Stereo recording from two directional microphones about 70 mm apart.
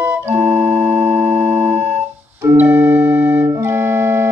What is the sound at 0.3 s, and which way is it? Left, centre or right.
Music, right.